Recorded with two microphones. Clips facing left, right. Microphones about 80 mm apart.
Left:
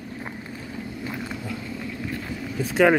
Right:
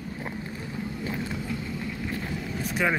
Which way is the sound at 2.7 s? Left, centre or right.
Left.